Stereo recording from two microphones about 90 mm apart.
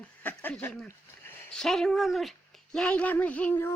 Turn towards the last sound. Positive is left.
turn(degrees=20)  # may be behind; listen again after turning